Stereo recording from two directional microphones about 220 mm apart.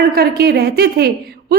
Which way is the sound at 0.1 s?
45° right (ahead or behind).